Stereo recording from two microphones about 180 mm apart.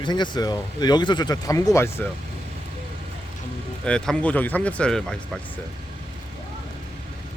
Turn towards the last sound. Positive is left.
turn(degrees=5)  # may be behind; listen again after turning